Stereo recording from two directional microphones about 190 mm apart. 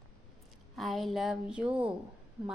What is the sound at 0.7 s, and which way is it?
A woman's voice, centre (ahead or behind).